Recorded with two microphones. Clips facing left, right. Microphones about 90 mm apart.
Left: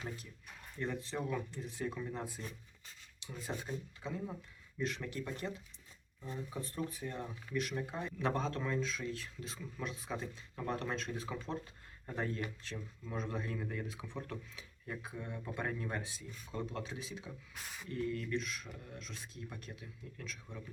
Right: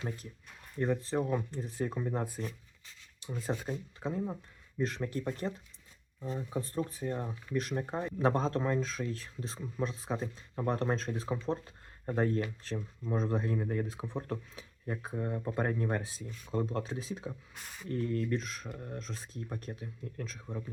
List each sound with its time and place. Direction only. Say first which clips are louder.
0.8 s speech: right 8 dB; 40° right (ahead or behind)
3.7 s speech: right 5 dB; 35° right (ahead or behind)